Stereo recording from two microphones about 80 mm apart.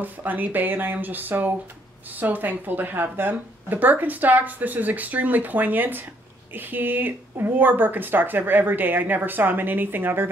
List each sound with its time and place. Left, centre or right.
0.0 s speech: right